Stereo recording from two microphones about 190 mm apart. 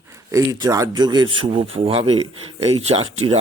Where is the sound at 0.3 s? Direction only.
15° right (ahead or behind).